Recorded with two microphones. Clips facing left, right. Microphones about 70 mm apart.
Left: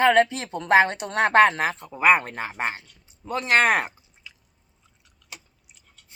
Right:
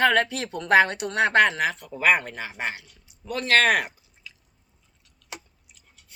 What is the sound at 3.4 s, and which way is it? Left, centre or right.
Speech, centre.